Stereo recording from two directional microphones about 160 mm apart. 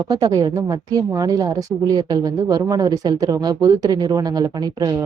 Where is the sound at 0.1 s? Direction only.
25° right (ahead or behind).